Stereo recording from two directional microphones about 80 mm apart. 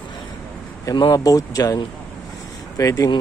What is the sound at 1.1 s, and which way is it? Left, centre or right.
Speech, left.